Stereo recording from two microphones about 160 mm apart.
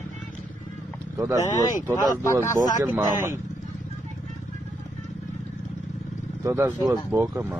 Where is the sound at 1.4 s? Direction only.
20° left (ahead or behind).